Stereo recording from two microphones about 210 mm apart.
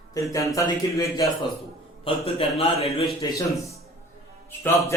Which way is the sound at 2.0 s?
30° left (ahead or behind).